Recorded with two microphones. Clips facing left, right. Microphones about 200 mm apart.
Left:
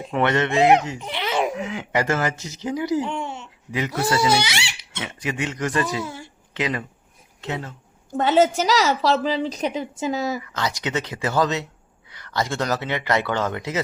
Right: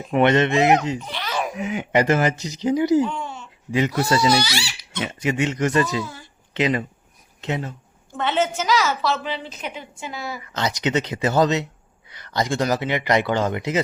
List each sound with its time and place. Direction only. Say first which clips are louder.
0.1 s speech: right 4 dB; 20° right (ahead or behind)
0.9 s baby laughter: left 3 dB; 20° left (ahead or behind)
1.5 s speech: right 4 dB; 20° right (ahead or behind)
3.0 s speech: right 3 dB; 25° left (ahead or behind)
3.7 s speech: right 3 dB; 25° right (ahead or behind)
6.0 s speech: even; 25° left (ahead or behind)
6.5 s speech: right 5 dB; 25° right (ahead or behind)
8.1 s a woman's voice: left 5 dB; 40° left (ahead or behind)
10.4 s speech: right 3 dB; 20° right (ahead or behind)